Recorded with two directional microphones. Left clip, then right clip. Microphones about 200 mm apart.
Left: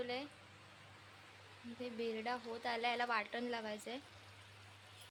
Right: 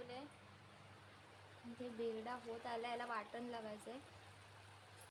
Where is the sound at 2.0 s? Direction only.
15° left (ahead or behind).